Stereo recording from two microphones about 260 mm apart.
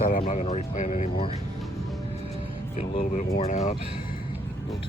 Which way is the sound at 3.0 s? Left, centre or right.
Left.